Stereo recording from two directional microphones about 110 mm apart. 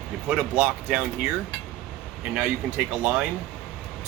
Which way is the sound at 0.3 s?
15° right (ahead or behind).